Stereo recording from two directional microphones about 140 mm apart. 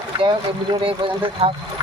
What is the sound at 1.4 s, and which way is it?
Speech, 45° right (ahead or behind).